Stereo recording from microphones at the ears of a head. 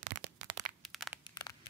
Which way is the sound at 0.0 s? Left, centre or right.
Right.